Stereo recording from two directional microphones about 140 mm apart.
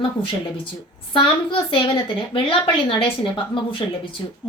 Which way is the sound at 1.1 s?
40° left (ahead or behind).